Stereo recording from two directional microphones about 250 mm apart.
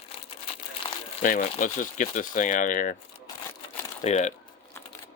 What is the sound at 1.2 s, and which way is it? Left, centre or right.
Speech, left.